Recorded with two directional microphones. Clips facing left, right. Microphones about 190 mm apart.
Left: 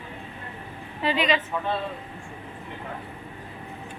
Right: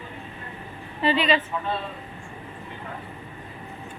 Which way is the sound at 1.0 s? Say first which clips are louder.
Right 2 dB; 10° left (ahead or behind).